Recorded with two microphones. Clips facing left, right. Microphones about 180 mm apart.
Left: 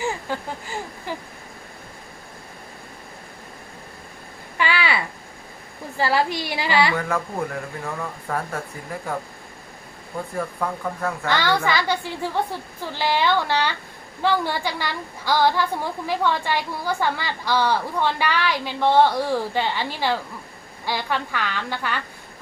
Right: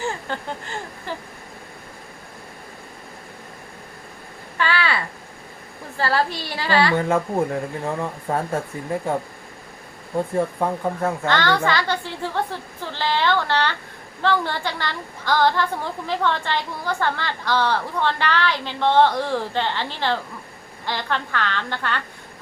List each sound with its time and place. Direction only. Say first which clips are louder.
0.0 s speech: left 1 dB; 10° left (ahead or behind)
4.5 s a sound: even; 15° left (ahead or behind)
6.0 s a woman's voice: left 1 dB; 15° left (ahead or behind)
6.9 s speech: right 5 dB; 25° right (ahead or behind)
10.3 s speech: right 3 dB; 25° right (ahead or behind)
11.3 s a woman's voice: even; 10° left (ahead or behind)